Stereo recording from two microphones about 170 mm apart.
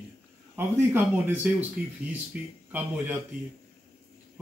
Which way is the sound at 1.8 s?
60° right (ahead or behind).